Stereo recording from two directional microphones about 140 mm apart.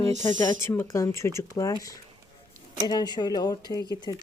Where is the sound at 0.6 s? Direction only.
20° left (ahead or behind).